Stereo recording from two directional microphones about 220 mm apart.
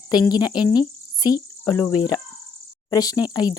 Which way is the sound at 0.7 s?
15° left (ahead or behind).